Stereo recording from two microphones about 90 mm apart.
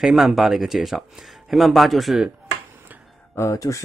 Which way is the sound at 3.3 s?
35° left (ahead or behind).